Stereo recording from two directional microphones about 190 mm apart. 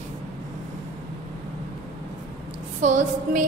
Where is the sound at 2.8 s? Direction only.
40° right (ahead or behind).